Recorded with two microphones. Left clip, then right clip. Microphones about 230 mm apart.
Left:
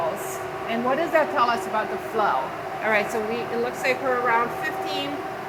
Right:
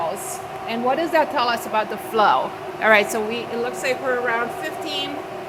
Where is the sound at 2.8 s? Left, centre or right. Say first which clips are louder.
Right 7 dB; right.